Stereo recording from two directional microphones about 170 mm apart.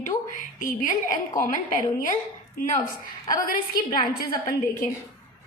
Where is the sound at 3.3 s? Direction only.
55° left (ahead or behind).